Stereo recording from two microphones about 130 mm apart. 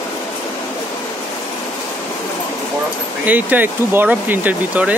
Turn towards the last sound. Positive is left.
turn(degrees=-10)  # may be behind; listen again after turning